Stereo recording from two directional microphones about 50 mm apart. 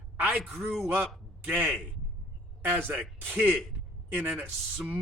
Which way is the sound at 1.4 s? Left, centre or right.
Right.